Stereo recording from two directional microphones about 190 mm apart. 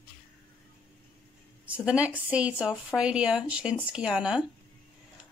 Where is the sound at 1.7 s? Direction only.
5° right (ahead or behind).